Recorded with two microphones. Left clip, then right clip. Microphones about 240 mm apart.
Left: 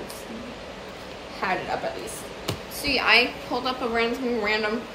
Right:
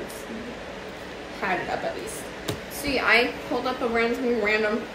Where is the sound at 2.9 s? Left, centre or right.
Centre.